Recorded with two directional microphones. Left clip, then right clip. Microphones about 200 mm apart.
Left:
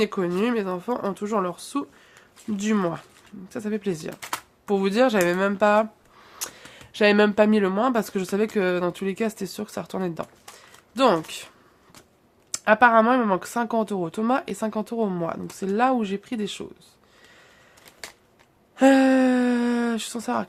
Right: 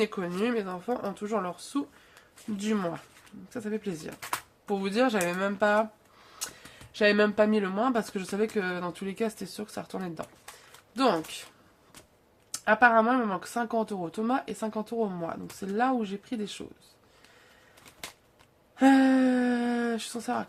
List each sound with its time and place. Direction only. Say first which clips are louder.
0.0 s speech: left 5 dB; 35° left (ahead or behind)
6.9 s speech: left 5 dB; 40° left (ahead or behind)
12.5 s speech: left 5 dB; 40° left (ahead or behind)
18.8 s speech: left 5 dB; 40° left (ahead or behind)